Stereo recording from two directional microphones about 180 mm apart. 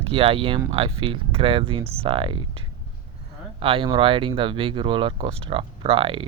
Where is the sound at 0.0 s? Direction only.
30° right (ahead or behind).